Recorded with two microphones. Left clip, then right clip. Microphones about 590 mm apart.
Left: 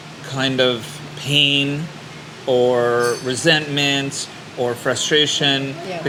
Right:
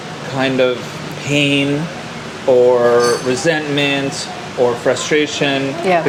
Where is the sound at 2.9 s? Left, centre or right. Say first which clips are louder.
Right 6 dB; left.